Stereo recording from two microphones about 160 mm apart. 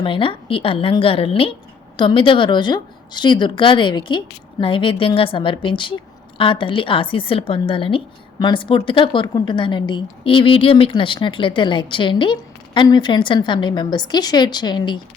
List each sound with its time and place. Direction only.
0.0 s a woman's voice: 35° left (ahead or behind)